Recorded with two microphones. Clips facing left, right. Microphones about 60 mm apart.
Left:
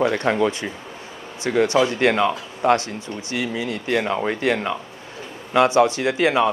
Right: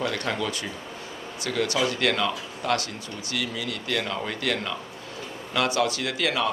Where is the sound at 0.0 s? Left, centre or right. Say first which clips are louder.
Left 9 dB; left.